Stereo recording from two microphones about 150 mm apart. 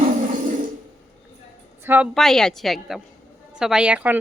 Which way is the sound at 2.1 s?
5° left (ahead or behind).